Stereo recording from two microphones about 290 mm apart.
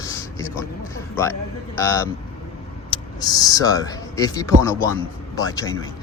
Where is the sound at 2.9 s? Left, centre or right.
Centre.